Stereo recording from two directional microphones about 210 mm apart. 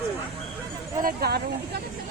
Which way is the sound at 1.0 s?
50° right (ahead or behind).